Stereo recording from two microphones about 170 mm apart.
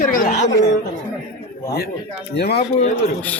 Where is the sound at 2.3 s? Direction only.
70° left (ahead or behind).